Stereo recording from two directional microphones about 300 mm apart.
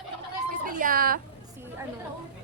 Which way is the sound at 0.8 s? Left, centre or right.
Right.